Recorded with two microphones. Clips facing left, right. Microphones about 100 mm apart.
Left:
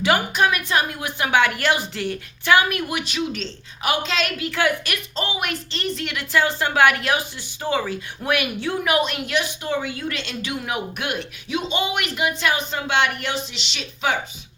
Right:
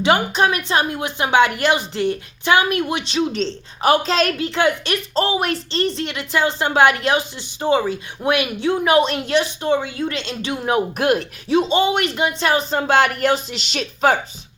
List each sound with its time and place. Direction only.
0.0 s a woman's voice: 25° right (ahead or behind)
4.4 s a woman's voice: 25° right (ahead or behind); by 14.2 s 45° right (ahead or behind)